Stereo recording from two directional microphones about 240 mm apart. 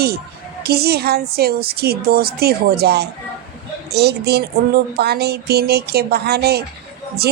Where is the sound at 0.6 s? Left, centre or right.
Right.